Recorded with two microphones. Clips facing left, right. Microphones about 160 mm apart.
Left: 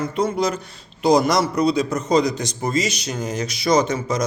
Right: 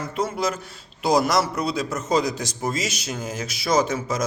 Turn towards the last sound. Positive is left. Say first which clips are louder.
# left 3 dB
turn(degrees=-5)  # may be behind; listen again after turning